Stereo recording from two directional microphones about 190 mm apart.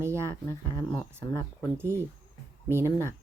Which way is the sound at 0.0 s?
15° right (ahead or behind).